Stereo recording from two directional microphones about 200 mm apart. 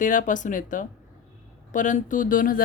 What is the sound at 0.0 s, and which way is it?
Speech, 40° left (ahead or behind).